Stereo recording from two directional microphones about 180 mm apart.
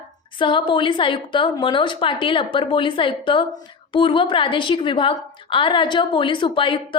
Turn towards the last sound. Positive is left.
turn(degrees=25)  # may be behind; listen again after turning